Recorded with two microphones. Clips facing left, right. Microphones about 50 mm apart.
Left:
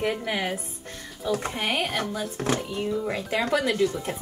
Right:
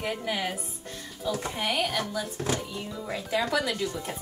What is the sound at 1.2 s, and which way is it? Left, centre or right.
Speech, left.